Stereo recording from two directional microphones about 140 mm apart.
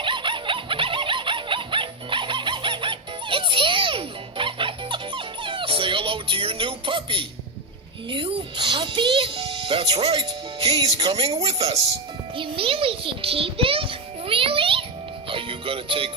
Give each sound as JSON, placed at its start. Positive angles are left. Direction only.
{"t": 0.0, "sound": "a sound", "side_deg": -35}
{"t": 8.0, "sound": "music", "side_deg": -40}
{"t": 9.9, "sound": "a child's voice", "side_deg": -50}
{"t": 15.3, "sound": "music", "side_deg": -40}